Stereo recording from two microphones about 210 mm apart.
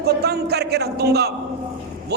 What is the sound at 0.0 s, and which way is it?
A man's voice, 50° right (ahead or behind).